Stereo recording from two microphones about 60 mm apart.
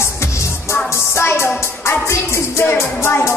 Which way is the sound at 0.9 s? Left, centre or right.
Left.